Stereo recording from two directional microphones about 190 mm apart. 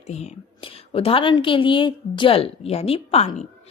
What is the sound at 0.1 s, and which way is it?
Speech, 35° left (ahead or behind).